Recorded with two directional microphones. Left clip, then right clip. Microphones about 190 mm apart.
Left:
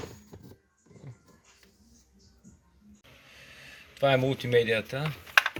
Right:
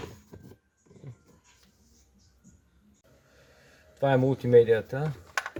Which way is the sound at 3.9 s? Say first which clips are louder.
Even; 50° right (ahead or behind).